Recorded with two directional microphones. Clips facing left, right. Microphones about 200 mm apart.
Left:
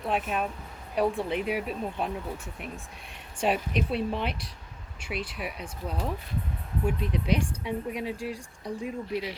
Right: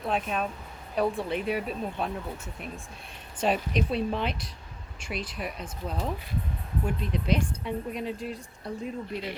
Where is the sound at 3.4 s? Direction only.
10° left (ahead or behind).